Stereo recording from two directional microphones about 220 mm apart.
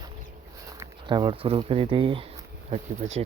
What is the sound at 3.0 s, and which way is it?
Speech, 35° right (ahead or behind).